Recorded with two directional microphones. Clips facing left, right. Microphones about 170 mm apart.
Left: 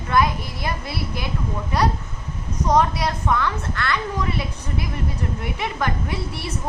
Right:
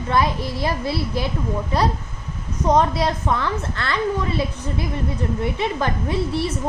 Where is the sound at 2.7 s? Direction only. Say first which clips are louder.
Right 2 dB; 25° right (ahead or behind).